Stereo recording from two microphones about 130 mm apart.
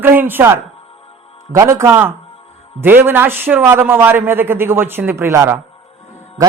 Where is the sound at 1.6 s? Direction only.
20° right (ahead or behind).